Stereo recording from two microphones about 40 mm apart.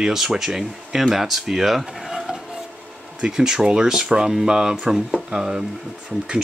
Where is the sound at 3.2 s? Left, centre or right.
Centre.